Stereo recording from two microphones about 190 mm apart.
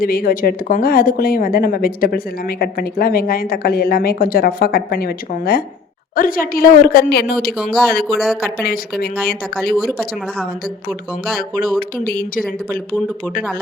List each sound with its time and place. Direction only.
0.0 s speech: 50° left (ahead or behind)
7.5 s a woman's voice: centre (ahead or behind)
7.9 s speech: 50° left (ahead or behind)
8.2 s a woman's voice: centre (ahead or behind)
8.6 s speech: 50° left (ahead or behind)
11.8 s speech: 50° left (ahead or behind)